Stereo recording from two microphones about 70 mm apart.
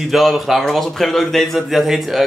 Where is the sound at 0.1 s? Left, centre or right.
Centre.